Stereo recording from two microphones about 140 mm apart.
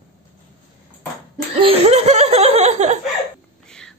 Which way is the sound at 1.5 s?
45° right (ahead or behind).